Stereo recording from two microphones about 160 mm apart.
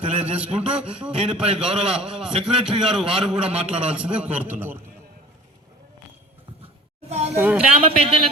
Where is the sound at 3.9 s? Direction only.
10° right (ahead or behind).